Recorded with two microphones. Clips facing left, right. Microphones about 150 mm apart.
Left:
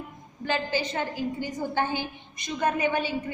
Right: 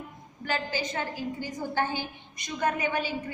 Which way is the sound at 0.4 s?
25° left (ahead or behind).